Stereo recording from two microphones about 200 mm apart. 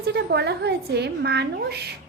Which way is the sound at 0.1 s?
55° right (ahead or behind).